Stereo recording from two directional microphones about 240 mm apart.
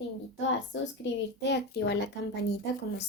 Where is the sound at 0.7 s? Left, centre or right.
Left.